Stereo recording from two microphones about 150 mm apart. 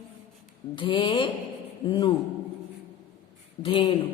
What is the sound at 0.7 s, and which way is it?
A woman's voice, 35° left (ahead or behind).